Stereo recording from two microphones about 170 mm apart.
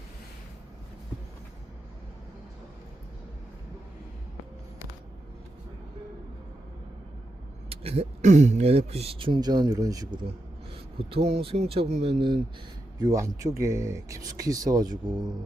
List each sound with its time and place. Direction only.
7.7 s speech: 35° right (ahead or behind)
13.0 s speech: 20° right (ahead or behind)